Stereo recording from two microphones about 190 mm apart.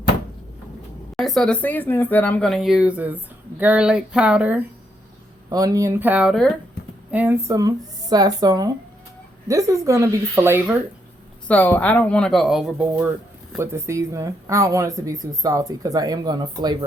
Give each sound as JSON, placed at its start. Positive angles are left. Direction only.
{"t": 1.1, "sound": "speech", "side_deg": 0}
{"t": 5.5, "sound": "speech", "side_deg": -20}
{"t": 11.4, "sound": "speech", "side_deg": 10}